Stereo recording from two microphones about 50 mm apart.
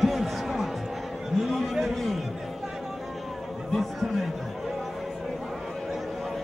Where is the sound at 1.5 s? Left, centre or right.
Centre.